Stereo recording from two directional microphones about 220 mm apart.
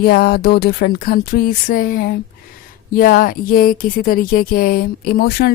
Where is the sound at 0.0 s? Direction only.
45° left (ahead or behind).